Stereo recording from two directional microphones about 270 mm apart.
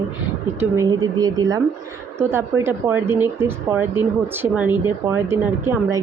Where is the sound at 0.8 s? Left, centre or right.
Centre.